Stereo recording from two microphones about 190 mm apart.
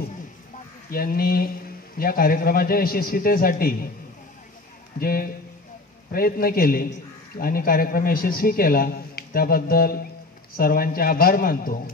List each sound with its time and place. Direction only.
0.9 s a man's voice: 50° left (ahead or behind)
4.9 s a man's voice: 50° left (ahead or behind)